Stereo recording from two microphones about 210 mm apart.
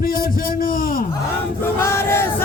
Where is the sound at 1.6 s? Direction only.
10° left (ahead or behind).